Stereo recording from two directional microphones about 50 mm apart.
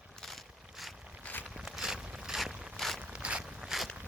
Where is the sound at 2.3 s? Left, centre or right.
Centre.